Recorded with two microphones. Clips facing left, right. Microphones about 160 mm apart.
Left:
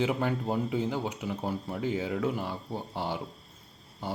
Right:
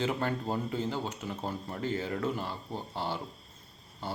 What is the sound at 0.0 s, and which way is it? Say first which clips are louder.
Speech: left 3 dB; 15° left (ahead or behind).